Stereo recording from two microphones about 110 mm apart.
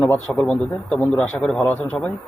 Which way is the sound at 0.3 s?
5° left (ahead or behind).